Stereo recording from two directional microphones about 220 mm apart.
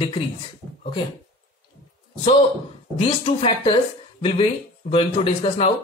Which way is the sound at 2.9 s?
25° left (ahead or behind).